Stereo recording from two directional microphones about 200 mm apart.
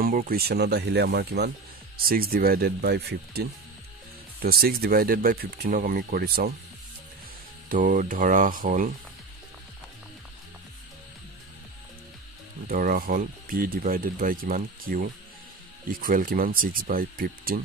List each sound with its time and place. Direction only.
0.0 s speech: 45° right (ahead or behind)
7.7 s speech: 40° right (ahead or behind)
12.6 s speech: 45° right (ahead or behind)